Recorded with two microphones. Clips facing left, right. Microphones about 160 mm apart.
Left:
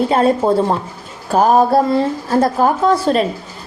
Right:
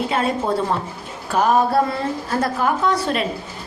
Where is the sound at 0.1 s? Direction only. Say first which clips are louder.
Left 7 dB; 35° left (ahead or behind).